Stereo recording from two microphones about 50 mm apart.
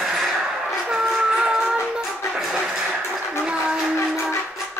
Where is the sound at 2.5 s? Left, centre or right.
Centre.